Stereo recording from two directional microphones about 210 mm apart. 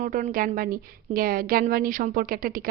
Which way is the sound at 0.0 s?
40° right (ahead or behind).